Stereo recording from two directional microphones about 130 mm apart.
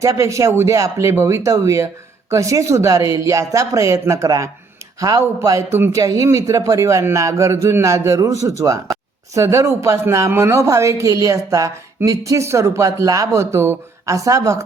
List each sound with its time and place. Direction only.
0.0 s a woman's voice: 25° right (ahead or behind)